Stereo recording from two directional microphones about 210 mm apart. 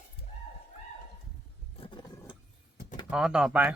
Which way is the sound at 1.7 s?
25° left (ahead or behind).